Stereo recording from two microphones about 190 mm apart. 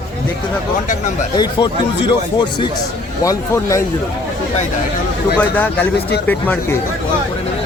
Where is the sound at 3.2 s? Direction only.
15° left (ahead or behind).